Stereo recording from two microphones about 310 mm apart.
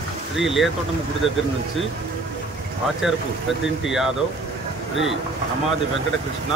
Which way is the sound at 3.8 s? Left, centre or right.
Centre.